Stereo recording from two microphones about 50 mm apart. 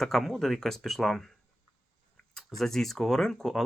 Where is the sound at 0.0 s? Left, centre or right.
Centre.